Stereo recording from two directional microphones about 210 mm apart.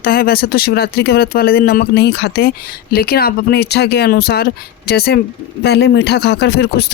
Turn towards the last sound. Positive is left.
turn(degrees=50)  # may be behind; listen again after turning